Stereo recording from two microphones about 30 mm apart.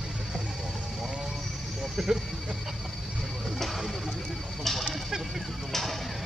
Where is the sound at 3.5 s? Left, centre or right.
Centre.